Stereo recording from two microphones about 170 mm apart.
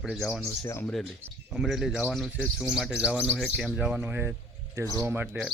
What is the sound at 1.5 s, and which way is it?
Speech, centre (ahead or behind).